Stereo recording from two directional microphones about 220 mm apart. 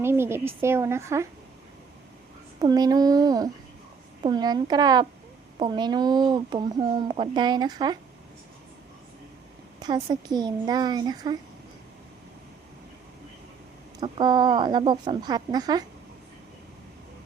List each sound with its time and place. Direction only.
0.0 s speech: 10° right (ahead or behind)
2.6 s speech: 15° right (ahead or behind)
9.8 s speech: 20° right (ahead or behind)
14.0 s speech: 20° right (ahead or behind)